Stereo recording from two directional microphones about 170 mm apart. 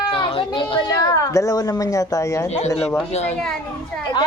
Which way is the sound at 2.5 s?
40° left (ahead or behind).